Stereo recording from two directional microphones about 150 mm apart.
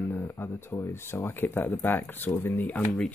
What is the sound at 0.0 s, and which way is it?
Speech, 15° left (ahead or behind).